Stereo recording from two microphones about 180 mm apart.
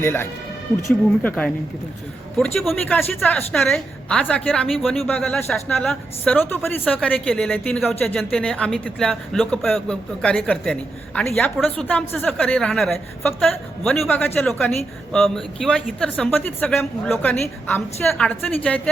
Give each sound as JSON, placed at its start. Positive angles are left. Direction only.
{"t": 0.0, "sound": "a woman's voice", "side_deg": 15}
{"t": 2.4, "sound": "a woman's voice", "side_deg": 5}